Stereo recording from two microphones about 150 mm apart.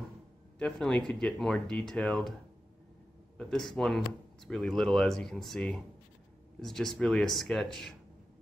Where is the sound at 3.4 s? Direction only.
5° left (ahead or behind).